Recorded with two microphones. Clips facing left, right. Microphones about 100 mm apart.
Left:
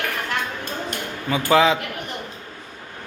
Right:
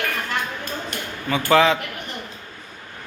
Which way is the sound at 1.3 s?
15° left (ahead or behind).